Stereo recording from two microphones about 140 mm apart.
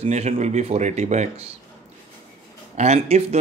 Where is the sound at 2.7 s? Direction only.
50° right (ahead or behind).